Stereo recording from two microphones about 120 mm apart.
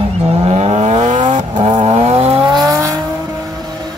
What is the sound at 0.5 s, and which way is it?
Vehicle, 60° right (ahead or behind).